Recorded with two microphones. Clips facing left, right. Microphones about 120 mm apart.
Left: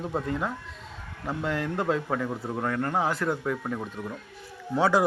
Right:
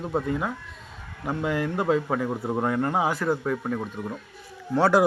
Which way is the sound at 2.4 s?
20° right (ahead or behind).